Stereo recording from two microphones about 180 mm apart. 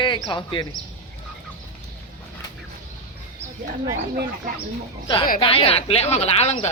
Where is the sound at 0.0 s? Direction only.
25° left (ahead or behind).